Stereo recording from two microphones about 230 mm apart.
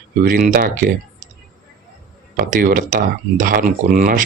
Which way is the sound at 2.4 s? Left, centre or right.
Right.